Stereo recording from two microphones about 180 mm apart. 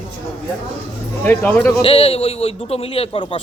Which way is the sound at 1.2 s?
10° left (ahead or behind).